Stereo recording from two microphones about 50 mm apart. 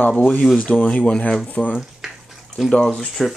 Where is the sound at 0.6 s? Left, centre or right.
Left.